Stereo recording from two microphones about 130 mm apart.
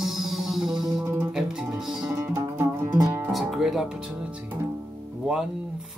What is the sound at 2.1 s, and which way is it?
Music, 20° right (ahead or behind).